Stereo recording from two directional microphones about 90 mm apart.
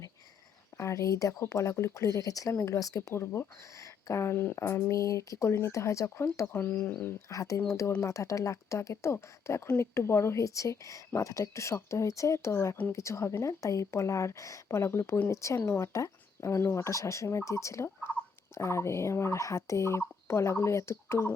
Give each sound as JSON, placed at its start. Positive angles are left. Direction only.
{"t": 0.8, "sound": "speech", "side_deg": 35}
{"t": 7.3, "sound": "speech", "side_deg": 40}